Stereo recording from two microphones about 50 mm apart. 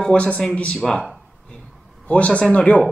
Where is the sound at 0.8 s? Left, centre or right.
Centre.